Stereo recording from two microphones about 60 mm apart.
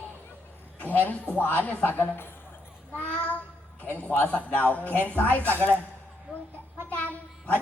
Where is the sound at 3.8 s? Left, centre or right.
Left.